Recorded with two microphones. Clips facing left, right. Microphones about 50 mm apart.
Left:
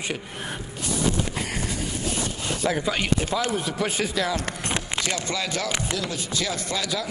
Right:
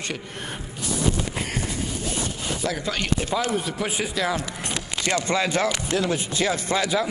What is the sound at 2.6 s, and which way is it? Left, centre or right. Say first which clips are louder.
Speech: left 3 dB; centre.